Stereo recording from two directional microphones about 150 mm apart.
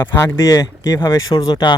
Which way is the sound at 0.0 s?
15° left (ahead or behind).